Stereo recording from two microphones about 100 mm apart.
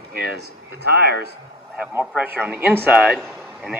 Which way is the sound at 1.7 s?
15° right (ahead or behind).